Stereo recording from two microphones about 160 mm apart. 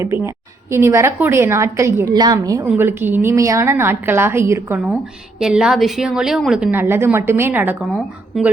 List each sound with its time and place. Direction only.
0.0 s a woman's voice: 15° right (ahead or behind)
2.6 s a woman's voice: 15° right (ahead or behind)
5.4 s a woman's voice: 5° right (ahead or behind)
8.3 s a woman's voice: centre (ahead or behind)